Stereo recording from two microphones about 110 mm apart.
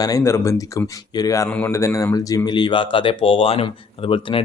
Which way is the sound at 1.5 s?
15° left (ahead or behind).